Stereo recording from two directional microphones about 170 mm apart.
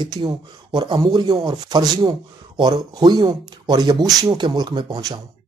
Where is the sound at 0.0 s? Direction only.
25° right (ahead or behind).